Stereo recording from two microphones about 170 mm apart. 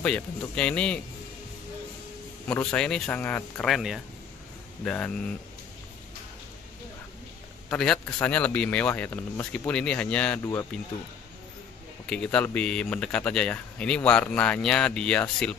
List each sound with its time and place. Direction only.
0.0 s speech: 5° left (ahead or behind)
2.4 s speech: 5° left (ahead or behind)
7.7 s speech: centre (ahead or behind)
10.4 s speech: 20° left (ahead or behind)
12.1 s speech: 5° left (ahead or behind)